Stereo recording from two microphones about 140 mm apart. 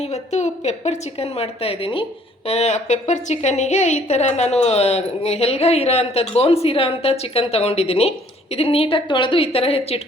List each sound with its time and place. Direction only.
0.0 s a woman's voice: 55° left (ahead or behind)
2.5 s a woman's voice: 50° left (ahead or behind)